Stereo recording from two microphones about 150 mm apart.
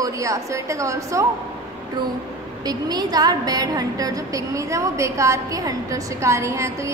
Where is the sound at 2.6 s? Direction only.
25° right (ahead or behind).